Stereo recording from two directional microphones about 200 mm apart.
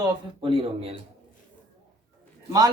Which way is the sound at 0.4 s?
25° right (ahead or behind).